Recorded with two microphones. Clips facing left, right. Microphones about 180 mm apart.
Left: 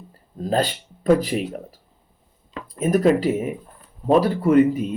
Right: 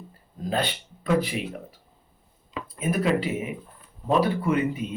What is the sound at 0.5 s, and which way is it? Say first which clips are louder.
Speech: left 6 dB; 40° left (ahead or behind).